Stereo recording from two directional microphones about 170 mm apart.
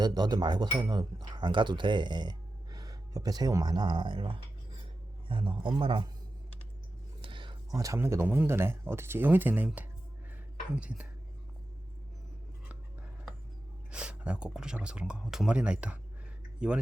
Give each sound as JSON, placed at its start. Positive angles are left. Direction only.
{"t": 0.0, "sound": "speech", "side_deg": -25}
{"t": 7.2, "sound": "speech", "side_deg": -30}
{"t": 13.9, "sound": "speech", "side_deg": -5}